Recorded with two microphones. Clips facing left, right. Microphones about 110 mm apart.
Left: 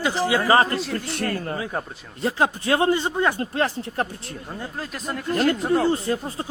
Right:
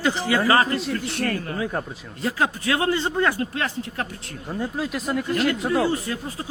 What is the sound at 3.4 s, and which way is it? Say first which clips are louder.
Speech: left 2 dB; 35° left (ahead or behind).